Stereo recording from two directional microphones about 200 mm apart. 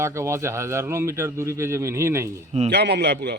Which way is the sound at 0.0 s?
15° right (ahead or behind).